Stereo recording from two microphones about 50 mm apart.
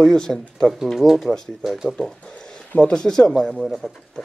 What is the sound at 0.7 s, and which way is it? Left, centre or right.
Speech, centre.